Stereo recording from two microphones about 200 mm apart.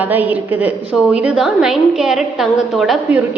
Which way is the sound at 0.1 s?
10° right (ahead or behind).